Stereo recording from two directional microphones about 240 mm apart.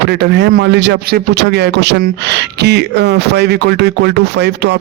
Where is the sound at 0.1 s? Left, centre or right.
Right.